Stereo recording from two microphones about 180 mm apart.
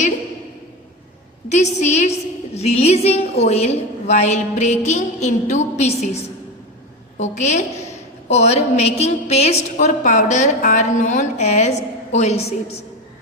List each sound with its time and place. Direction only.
1.5 s a woman's voice: 40° left (ahead or behind)
7.2 s a woman's voice: 40° left (ahead or behind)